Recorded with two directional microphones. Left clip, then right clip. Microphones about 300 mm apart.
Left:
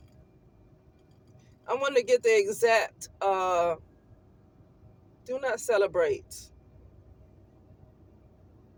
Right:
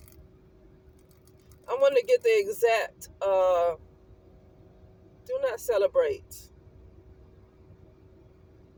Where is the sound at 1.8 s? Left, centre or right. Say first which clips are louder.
Right 3 dB; centre.